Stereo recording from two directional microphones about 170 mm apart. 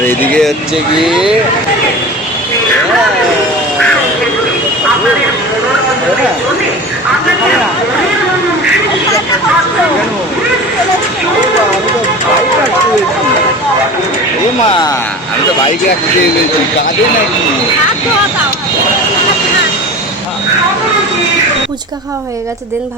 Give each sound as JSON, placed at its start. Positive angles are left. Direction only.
{"t": 0.0, "sound": "speech", "side_deg": 10}
{"t": 0.9, "sound": "speech", "side_deg": 0}
{"t": 14.7, "sound": "speech", "side_deg": 25}